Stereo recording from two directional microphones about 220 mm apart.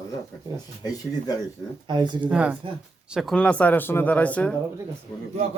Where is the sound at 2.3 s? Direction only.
5° right (ahead or behind).